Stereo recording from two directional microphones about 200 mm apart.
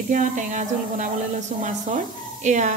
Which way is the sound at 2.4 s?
40° right (ahead or behind).